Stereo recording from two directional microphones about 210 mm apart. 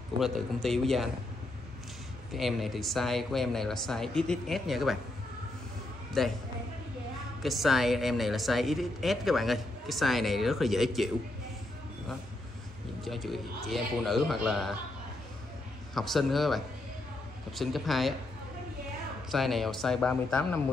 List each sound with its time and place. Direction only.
0.2 s speech: centre (ahead or behind)
2.3 s speech: centre (ahead or behind)
6.2 s speech: centre (ahead or behind)
7.4 s speech: centre (ahead or behind)
13.0 s speech: centre (ahead or behind)
15.9 s speech: centre (ahead or behind)
19.3 s speech: centre (ahead or behind)